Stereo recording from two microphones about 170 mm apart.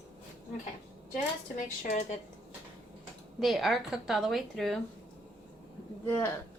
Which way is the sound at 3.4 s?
Centre (ahead or behind).